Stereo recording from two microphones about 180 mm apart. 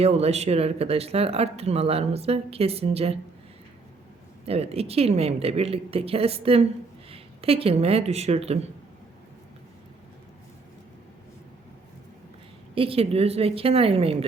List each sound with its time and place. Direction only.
0.0 s speech: 35° right (ahead or behind)
4.4 s speech: 35° right (ahead or behind)
12.7 s speech: 30° right (ahead or behind)